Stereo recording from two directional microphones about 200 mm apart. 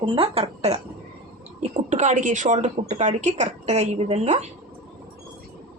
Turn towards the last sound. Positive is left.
turn(degrees=-35)  # may be behind; listen again after turning